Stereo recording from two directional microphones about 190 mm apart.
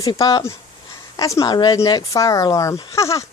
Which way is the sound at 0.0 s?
20° left (ahead or behind).